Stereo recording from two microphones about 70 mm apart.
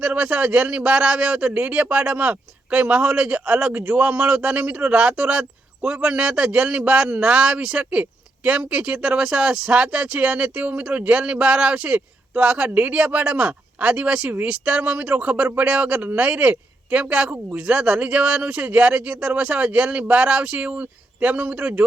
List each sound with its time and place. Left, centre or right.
0.0 s a man's voice: centre